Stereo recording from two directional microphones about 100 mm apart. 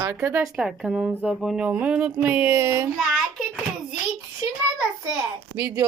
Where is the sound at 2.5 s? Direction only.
30° right (ahead or behind).